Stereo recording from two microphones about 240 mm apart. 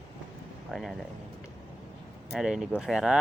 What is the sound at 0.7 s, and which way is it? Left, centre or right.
Speech, centre.